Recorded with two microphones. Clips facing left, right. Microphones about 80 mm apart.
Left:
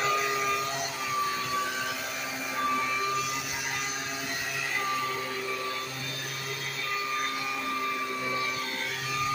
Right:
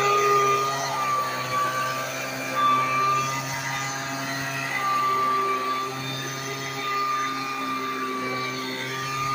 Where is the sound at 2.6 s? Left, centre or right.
Right.